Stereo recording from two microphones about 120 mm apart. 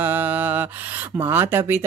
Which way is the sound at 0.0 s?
15° right (ahead or behind).